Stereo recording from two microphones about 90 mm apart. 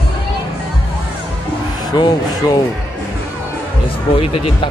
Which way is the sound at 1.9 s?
50° left (ahead or behind).